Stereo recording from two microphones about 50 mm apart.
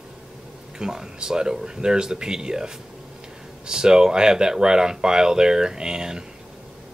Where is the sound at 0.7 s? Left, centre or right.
Centre.